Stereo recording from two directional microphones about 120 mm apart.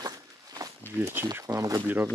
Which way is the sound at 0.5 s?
25° right (ahead or behind).